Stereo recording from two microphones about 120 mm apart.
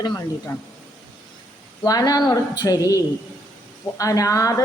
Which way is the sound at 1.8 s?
30° left (ahead or behind).